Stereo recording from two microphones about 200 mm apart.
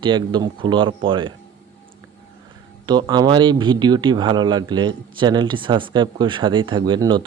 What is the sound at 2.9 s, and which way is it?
Speech, 20° right (ahead or behind).